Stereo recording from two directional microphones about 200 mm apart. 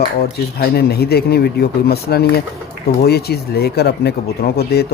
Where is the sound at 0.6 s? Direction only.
50° left (ahead or behind).